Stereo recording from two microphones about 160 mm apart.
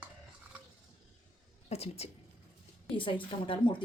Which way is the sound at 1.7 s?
40° left (ahead or behind).